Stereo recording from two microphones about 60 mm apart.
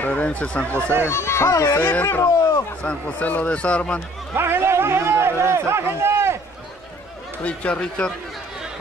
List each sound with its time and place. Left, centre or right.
0.0 s speech: left
1.0 s speech: left
2.0 s speech: left
2.8 s speech: centre
4.4 s a man's voice: right
7.4 s speech: centre